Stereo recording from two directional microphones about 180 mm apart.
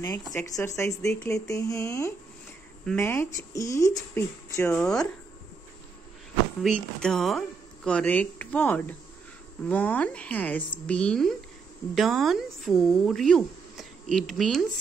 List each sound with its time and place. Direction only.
0.0 s speech: 20° left (ahead or behind)
4.7 s speech: 5° left (ahead or behind)
6.6 s speech: 5° left (ahead or behind)